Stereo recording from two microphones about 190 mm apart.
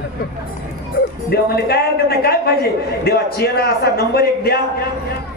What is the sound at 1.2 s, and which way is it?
A man's voice, 55° left (ahead or behind).